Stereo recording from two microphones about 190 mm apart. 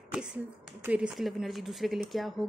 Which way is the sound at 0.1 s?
5° right (ahead or behind).